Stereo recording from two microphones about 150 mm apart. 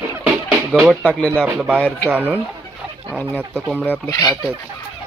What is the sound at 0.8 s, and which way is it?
Speech, 5° left (ahead or behind).